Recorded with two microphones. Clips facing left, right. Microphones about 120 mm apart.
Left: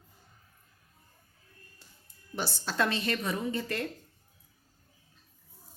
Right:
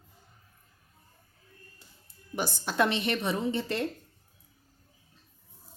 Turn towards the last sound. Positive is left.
turn(degrees=-25)  # may be behind; listen again after turning